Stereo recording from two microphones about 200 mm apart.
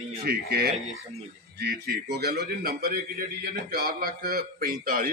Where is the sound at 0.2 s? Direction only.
50° right (ahead or behind).